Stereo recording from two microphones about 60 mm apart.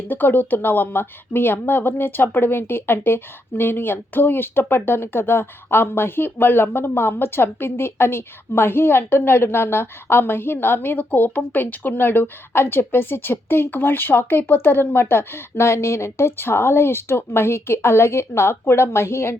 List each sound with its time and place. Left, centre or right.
0.1 s speech: left